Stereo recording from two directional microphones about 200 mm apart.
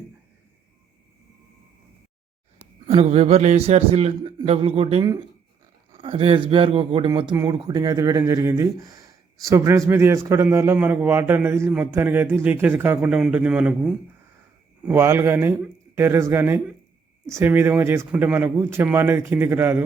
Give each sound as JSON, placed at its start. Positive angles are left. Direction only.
{"t": 2.8, "sound": "a man's voice", "side_deg": -30}